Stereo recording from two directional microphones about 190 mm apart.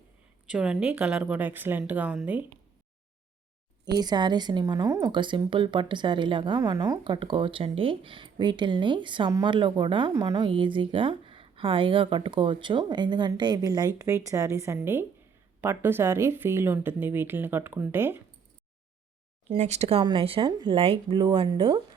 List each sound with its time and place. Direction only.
0.4 s speech: 5° right (ahead or behind)
3.8 s a woman's voice: 20° right (ahead or behind)
19.5 s a woman's voice: 35° right (ahead or behind)